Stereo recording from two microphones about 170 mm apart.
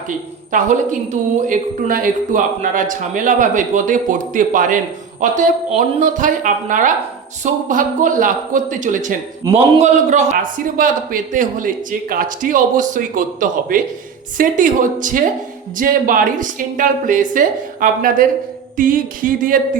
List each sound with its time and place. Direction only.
0.5 s a man's voice: 50° right (ahead or behind)